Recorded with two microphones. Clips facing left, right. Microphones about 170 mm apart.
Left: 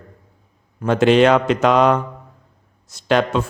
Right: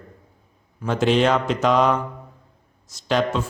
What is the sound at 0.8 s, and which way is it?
Speech, 65° left (ahead or behind).